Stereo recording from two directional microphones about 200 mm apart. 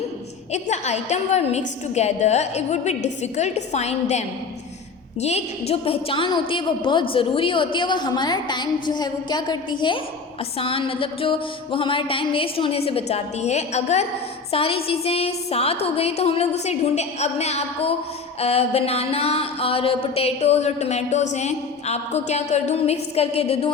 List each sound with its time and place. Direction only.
0.5 s a woman's voice: 35° left (ahead or behind)